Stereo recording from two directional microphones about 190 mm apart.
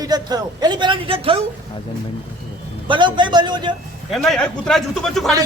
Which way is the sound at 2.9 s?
25° right (ahead or behind).